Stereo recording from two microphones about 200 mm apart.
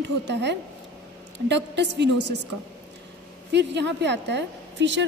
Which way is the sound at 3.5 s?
60° right (ahead or behind).